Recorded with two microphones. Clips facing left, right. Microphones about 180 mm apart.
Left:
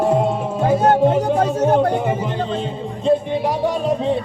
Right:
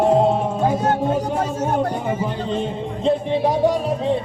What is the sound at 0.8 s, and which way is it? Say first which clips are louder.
Music: left 5 dB; 65° left (ahead or behind).